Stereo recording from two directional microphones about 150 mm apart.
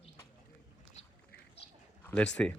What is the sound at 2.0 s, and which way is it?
Speech, 10° left (ahead or behind).